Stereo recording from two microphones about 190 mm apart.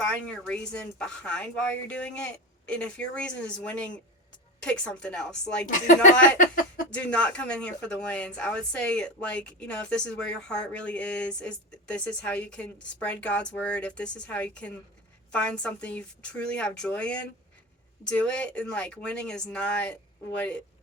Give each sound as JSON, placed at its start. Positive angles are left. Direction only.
{"t": 0.0, "sound": "speech", "side_deg": 5}
{"t": 5.6, "sound": "speech", "side_deg": 40}
{"t": 6.9, "sound": "speech", "side_deg": 5}